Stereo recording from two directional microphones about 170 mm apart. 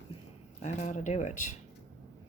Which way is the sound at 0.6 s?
45° left (ahead or behind).